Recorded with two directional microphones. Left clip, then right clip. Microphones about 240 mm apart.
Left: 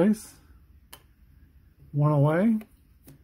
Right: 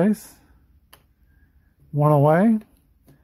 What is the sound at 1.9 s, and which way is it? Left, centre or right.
Speech, right.